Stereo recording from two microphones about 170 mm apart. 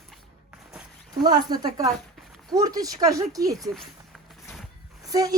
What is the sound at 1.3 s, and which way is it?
Speech, 25° right (ahead or behind).